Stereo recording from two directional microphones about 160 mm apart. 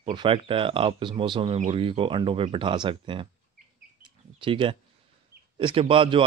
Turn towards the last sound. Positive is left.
turn(degrees=-30)  # may be behind; listen again after turning